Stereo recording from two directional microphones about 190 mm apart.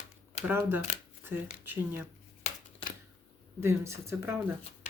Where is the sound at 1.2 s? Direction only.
10° right (ahead or behind).